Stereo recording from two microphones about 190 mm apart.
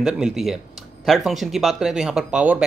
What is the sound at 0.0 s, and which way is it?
Speech, 5° right (ahead or behind).